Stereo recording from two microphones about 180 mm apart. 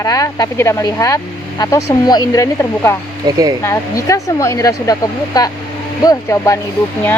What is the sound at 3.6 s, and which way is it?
Speech, 15° left (ahead or behind).